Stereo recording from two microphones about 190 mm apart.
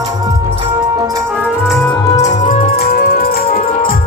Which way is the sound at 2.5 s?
45° left (ahead or behind).